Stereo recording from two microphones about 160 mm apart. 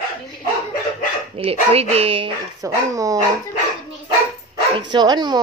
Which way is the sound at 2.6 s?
20° right (ahead or behind).